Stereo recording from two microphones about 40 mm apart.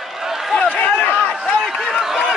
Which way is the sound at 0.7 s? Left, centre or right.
Left.